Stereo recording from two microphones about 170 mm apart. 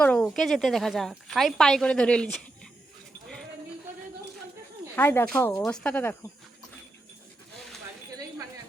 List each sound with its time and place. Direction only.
0.0 s a woman's voice: 5° left (ahead or behind)
4.9 s speech: 10° left (ahead or behind)